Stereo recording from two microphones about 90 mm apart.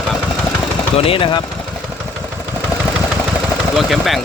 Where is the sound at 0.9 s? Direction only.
90° left.